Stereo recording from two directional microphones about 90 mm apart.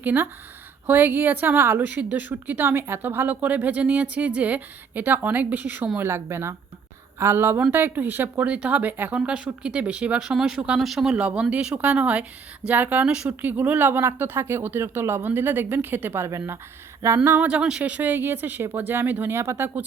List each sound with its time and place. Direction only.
0.0 s a woman's voice: 20° right (ahead or behind); by 11.1 s centre (ahead or behind)
11.1 s a woman's voice: 10° right (ahead or behind)
17.5 s a woman's voice: 10° right (ahead or behind)